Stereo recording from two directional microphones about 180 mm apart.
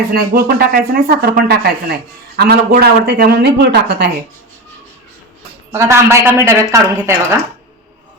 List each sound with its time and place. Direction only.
0.1 s speech: 55° right (ahead or behind)
5.7 s a woman's voice: 15° right (ahead or behind)